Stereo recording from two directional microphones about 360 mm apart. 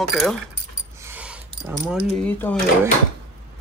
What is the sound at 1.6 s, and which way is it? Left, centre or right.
Speech, centre.